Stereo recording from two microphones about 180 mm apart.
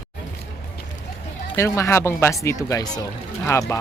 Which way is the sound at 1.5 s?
15° left (ahead or behind).